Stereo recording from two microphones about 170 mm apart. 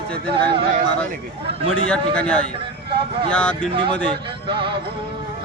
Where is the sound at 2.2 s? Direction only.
5° left (ahead or behind).